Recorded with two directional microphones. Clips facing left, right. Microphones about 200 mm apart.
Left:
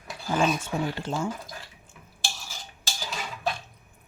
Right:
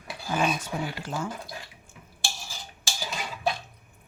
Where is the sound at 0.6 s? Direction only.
25° left (ahead or behind).